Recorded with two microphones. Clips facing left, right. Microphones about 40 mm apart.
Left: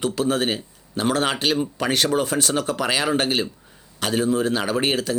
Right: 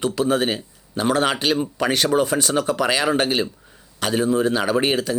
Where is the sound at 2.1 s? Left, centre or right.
Right.